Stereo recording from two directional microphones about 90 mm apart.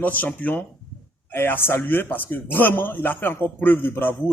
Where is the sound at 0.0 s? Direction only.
20° left (ahead or behind).